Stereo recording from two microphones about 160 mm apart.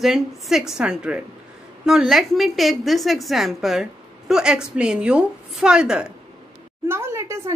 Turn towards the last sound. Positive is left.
turn(degrees=-15)  # may be behind; listen again after turning